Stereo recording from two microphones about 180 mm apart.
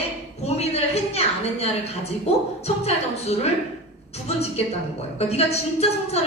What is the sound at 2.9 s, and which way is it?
A woman's voice, 35° left (ahead or behind).